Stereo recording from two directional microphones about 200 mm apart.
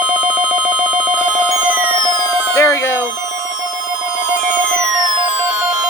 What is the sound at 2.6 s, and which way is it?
Music, 15° left (ahead or behind).